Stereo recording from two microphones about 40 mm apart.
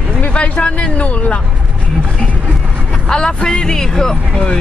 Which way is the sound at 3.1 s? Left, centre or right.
Centre.